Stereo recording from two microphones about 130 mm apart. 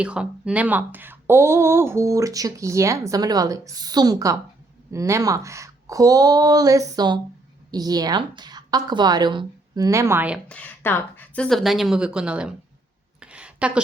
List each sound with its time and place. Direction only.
0.0 s a woman's voice: 10° right (ahead or behind)
10.5 s speech: 10° left (ahead or behind)
11.4 s speech: centre (ahead or behind)
13.1 s a sound: 10° right (ahead or behind)